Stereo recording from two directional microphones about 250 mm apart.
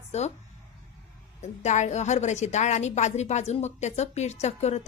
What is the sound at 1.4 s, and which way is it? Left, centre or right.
A woman's voice, left.